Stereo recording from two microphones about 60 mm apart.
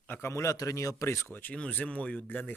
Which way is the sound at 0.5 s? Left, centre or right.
Left.